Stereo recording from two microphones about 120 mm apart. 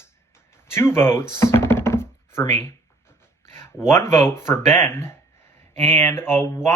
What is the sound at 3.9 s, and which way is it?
Speech, 20° left (ahead or behind).